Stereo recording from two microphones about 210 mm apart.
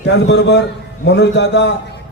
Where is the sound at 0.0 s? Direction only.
55° left (ahead or behind).